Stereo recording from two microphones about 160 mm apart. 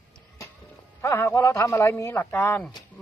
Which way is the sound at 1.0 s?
15° left (ahead or behind).